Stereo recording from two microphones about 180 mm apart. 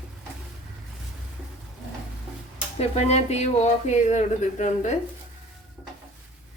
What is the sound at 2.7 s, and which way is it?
Speech, 35° left (ahead or behind).